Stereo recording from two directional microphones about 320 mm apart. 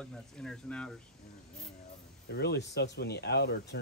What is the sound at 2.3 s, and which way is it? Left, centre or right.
Speech, left.